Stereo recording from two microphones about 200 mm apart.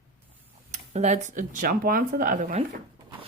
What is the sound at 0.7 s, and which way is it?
Speech, 35° right (ahead or behind).